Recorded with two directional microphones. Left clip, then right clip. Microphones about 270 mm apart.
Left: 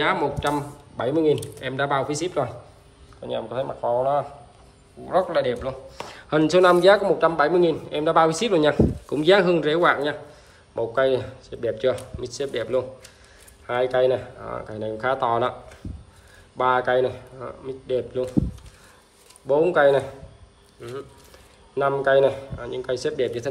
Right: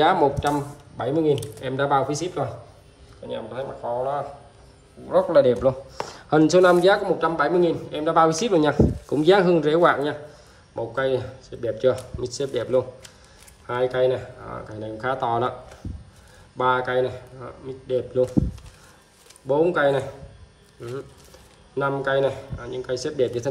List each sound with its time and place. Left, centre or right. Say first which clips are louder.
0.4 s speech: right 1 dB; centre
5.0 s speech: right 4 dB; centre
6.3 s speech: right 1 dB; centre
19.4 s speech: left 2 dB; centre
21.7 s speech: left 4 dB; centre